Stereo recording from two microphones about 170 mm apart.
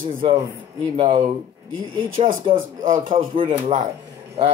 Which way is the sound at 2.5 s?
50° right (ahead or behind).